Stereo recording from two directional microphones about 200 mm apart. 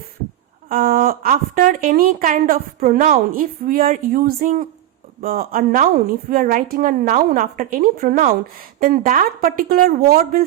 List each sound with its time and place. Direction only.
0.7 s a woman's voice: 45° right (ahead or behind)